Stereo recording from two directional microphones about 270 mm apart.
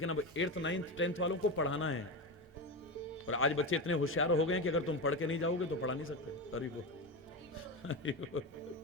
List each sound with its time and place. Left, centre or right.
0.0 s a man's voice: left
3.2 s a man's voice: left
7.9 s a man's voice: left